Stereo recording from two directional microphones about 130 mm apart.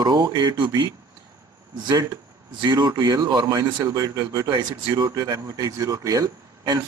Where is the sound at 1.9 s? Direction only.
25° right (ahead or behind).